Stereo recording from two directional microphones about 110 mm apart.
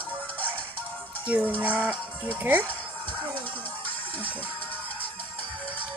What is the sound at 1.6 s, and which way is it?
Speech, 15° right (ahead or behind).